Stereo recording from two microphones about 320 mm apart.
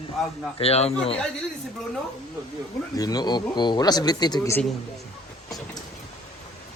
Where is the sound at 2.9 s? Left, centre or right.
Centre.